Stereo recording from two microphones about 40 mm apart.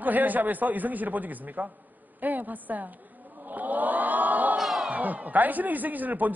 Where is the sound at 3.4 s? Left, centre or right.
Right.